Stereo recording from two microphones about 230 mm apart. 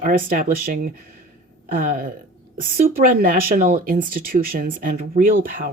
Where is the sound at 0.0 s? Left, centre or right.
Right.